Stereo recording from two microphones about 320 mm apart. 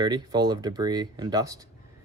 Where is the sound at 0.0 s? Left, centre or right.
Centre.